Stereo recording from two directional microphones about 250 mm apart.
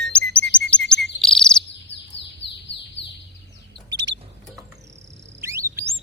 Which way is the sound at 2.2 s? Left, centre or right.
Left.